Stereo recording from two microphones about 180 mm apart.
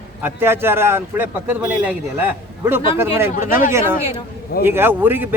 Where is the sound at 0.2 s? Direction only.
10° right (ahead or behind).